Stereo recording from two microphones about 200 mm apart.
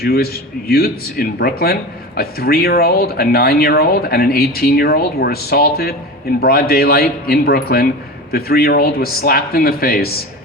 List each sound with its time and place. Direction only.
0.0 s speech: 50° left (ahead or behind)